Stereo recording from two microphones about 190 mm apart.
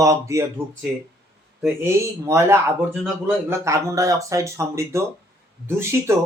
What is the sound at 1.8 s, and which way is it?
Speech, 15° right (ahead or behind).